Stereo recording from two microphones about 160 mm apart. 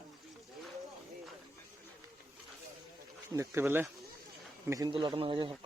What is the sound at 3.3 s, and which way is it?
Speech, 15° right (ahead or behind).